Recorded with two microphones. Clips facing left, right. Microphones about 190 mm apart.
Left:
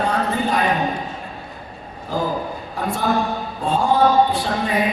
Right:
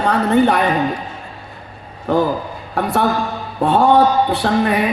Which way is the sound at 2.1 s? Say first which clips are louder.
Right 6 dB; 65° right (ahead or behind).